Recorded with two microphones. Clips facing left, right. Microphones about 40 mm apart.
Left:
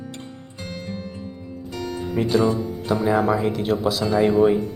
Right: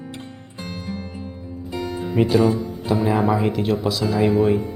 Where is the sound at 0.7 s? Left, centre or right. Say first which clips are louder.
Right 1 dB; centre.